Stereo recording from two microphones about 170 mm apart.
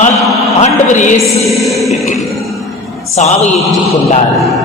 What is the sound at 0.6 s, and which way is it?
Speech, 45° left (ahead or behind).